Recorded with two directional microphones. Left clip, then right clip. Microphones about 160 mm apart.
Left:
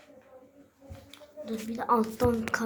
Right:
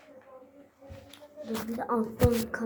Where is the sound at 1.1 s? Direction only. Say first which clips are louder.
Even; 40° left (ahead or behind).